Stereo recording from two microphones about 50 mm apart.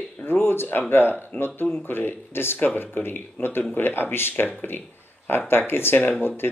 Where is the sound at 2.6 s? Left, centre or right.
Left.